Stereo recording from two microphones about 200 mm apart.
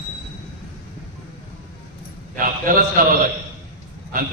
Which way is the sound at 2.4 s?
45° right (ahead or behind).